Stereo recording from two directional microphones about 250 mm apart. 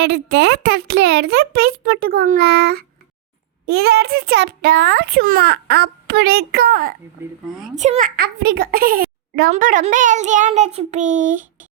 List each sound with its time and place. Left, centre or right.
0.0 s a child's voice: right
7.2 s speech: centre
7.8 s a child's voice: right